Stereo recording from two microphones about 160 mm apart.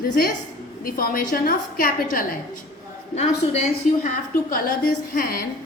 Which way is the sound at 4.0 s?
55° left (ahead or behind).